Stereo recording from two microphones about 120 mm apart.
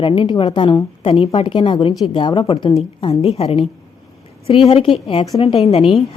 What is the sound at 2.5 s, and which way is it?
A woman's voice, 55° left (ahead or behind).